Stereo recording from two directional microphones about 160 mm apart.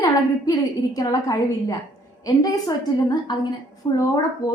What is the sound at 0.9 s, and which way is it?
A woman's voice, 20° left (ahead or behind).